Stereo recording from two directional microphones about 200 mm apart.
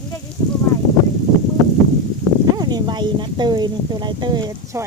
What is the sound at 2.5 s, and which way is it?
Speech, 20° right (ahead or behind).